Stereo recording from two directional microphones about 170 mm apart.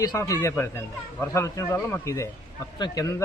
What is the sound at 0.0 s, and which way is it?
Speech, 20° left (ahead or behind).